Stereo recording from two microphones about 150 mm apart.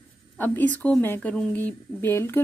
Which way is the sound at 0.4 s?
10° left (ahead or behind).